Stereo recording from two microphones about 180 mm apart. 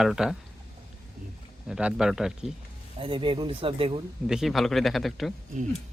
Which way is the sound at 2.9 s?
30° right (ahead or behind).